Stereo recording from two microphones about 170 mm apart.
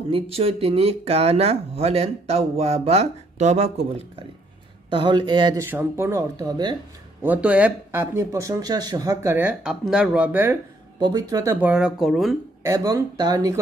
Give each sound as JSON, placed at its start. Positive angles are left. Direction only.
{"t": 0.1, "sound": "speech", "side_deg": -35}
{"t": 4.8, "sound": "speech", "side_deg": -30}
{"t": 5.6, "sound": "speech", "side_deg": -15}
{"t": 7.2, "sound": "speech", "side_deg": -10}
{"t": 11.0, "sound": "speech", "side_deg": -25}
{"t": 11.6, "sound": "speech", "side_deg": -5}
{"t": 12.6, "sound": "speech", "side_deg": -20}